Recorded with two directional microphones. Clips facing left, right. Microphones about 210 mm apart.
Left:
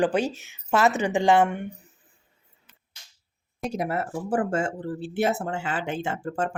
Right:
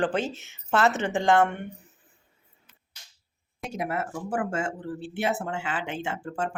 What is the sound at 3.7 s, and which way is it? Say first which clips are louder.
Speech: left 2 dB; 35° left (ahead or behind).